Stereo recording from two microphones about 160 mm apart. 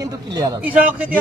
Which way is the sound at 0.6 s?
10° right (ahead or behind).